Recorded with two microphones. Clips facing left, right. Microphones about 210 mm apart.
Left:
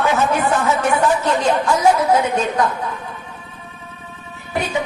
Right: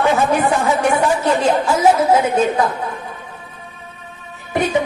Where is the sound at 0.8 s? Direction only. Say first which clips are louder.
Right 1 dB; 10° right (ahead or behind).